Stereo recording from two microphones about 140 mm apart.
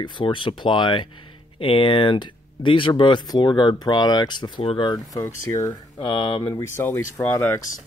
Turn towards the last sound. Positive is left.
turn(degrees=20)  # may be behind; listen again after turning